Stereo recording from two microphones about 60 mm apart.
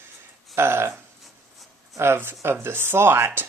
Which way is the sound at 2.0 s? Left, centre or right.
Right.